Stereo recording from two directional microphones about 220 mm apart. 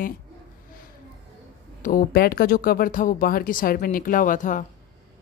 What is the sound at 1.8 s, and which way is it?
Speech, 40° left (ahead or behind).